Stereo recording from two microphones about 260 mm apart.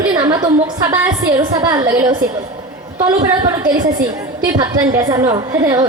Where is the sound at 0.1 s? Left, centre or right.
Centre.